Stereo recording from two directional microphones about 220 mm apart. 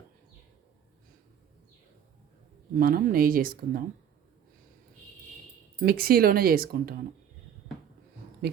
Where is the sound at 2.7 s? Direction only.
40° right (ahead or behind).